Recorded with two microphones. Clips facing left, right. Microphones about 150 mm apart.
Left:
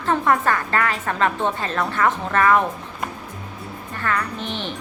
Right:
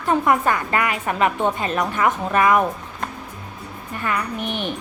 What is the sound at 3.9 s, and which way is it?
Speech, 15° right (ahead or behind).